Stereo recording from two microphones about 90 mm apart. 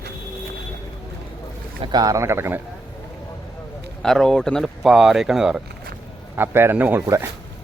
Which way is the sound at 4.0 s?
5° left (ahead or behind).